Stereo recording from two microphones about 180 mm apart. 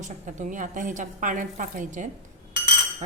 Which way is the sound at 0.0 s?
45° right (ahead or behind).